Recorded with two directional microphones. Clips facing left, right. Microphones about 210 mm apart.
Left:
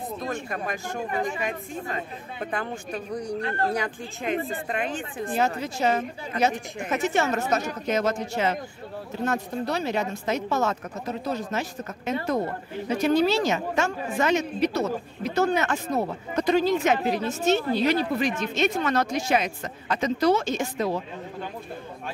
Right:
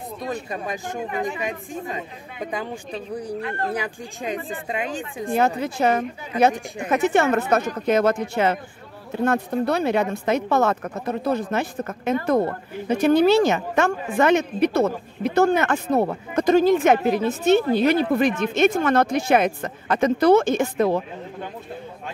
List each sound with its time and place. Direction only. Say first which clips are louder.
0.2 s speech: right 4 dB; 15° right (ahead or behind)
5.6 s a woman's voice: right 4 dB; 55° right (ahead or behind)